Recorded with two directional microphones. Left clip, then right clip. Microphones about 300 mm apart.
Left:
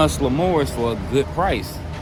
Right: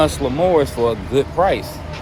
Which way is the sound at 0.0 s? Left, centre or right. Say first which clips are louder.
Right 3 dB; centre.